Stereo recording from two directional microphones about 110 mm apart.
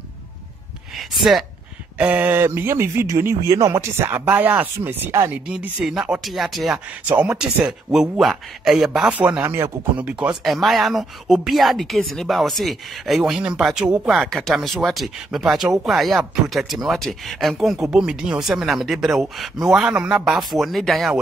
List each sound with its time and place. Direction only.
0.9 s speech: centre (ahead or behind)
2.0 s speech: 15° right (ahead or behind)
5.3 s speech: 10° right (ahead or behind)
9.2 s speech: 20° right (ahead or behind)
10.4 s speech: centre (ahead or behind)